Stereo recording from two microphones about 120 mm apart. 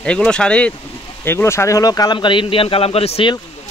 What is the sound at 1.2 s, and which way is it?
A man's voice, 20° left (ahead or behind).